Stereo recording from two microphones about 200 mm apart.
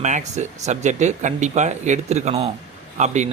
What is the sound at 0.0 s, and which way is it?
Speech, 35° right (ahead or behind).